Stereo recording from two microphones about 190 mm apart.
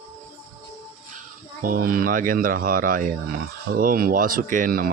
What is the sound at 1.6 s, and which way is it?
Speech, 50° right (ahead or behind).